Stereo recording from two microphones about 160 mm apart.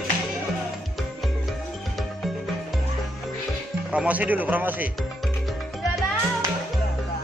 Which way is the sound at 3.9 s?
10° right (ahead or behind).